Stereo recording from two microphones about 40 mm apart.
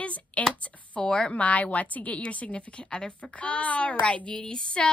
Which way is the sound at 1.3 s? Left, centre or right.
Left.